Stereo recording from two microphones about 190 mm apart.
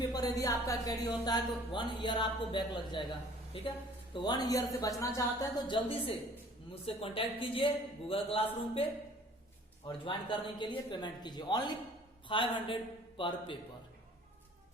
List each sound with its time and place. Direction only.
0.1 s speech: 20° left (ahead or behind)
4.1 s speech: 20° left (ahead or behind)
10.0 s speech: 25° left (ahead or behind)